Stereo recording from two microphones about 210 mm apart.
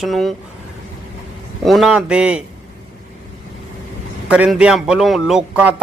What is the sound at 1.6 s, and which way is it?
Speech, centre (ahead or behind).